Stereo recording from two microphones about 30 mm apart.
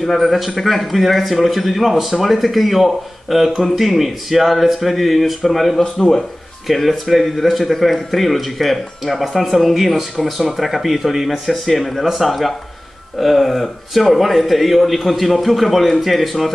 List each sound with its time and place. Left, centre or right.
0.1 s speech: centre
5.9 s speech: centre
6.7 s speech: centre